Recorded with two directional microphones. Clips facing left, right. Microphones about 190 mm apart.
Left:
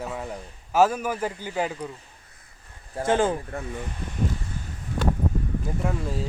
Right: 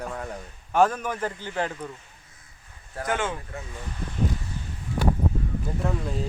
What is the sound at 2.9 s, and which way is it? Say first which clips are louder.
Speech: left 6 dB; 30° left (ahead or behind).